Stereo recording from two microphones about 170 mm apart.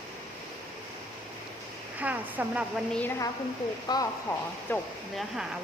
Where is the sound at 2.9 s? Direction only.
10° left (ahead or behind).